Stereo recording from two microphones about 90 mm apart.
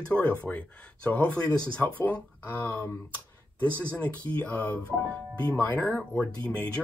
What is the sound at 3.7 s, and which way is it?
Speech, 25° right (ahead or behind).